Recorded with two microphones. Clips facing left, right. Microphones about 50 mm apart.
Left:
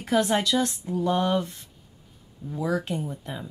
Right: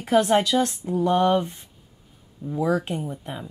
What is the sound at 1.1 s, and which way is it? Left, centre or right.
Speech, centre.